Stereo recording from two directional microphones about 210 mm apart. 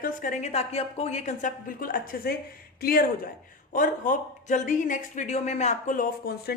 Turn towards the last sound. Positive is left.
turn(degrees=45)  # may be behind; listen again after turning